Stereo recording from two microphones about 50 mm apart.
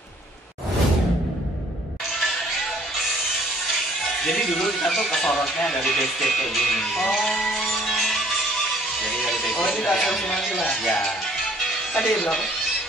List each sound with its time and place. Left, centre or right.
4.0 s speech: centre
7.8 s music: centre
9.4 s music: left
9.7 s speech: centre